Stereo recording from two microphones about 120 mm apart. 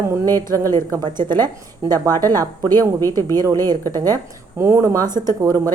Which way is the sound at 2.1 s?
20° left (ahead or behind).